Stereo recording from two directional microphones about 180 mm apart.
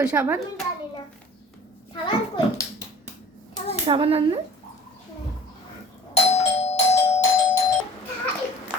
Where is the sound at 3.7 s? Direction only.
30° right (ahead or behind).